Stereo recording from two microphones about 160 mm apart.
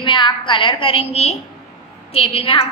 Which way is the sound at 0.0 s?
30° left (ahead or behind).